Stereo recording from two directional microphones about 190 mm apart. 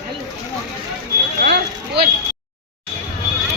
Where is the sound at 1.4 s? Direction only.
60° right (ahead or behind).